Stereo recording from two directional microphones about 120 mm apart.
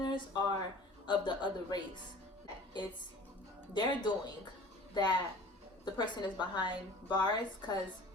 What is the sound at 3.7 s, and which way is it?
A woman's voice, 35° left (ahead or behind).